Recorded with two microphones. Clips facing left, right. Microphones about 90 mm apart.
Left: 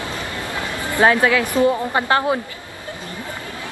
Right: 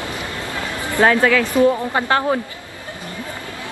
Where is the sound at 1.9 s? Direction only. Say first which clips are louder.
Even; 5° left (ahead or behind).